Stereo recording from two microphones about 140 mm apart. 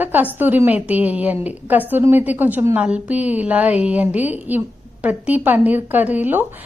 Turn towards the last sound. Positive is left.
turn(degrees=-10)  # may be behind; listen again after turning